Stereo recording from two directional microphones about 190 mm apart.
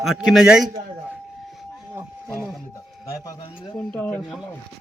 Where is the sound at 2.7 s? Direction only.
15° left (ahead or behind).